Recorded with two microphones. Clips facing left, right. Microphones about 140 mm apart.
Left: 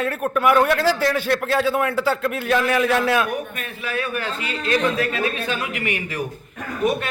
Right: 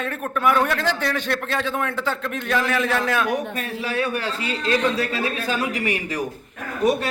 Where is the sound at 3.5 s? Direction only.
30° right (ahead or behind).